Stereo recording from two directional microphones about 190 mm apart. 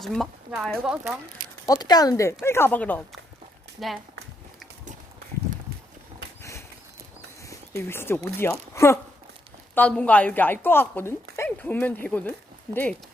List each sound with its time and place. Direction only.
0.0 s speech: centre (ahead or behind)
1.6 s a woman's voice: 20° left (ahead or behind); by 3.9 s centre (ahead or behind)
7.4 s a woman's voice: 15° left (ahead or behind)